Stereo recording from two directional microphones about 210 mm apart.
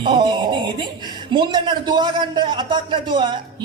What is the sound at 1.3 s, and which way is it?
A woman's voice, 20° right (ahead or behind).